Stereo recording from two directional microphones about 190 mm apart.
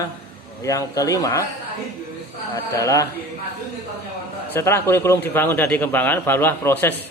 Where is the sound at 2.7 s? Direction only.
15° left (ahead or behind).